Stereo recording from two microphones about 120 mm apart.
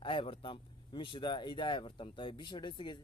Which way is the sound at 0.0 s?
45° left (ahead or behind).